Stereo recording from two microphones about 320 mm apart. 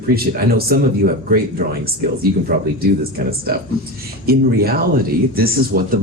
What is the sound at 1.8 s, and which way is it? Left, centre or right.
Speech, right.